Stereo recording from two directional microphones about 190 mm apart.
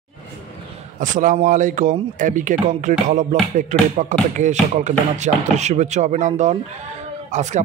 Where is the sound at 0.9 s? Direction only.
45° right (ahead or behind).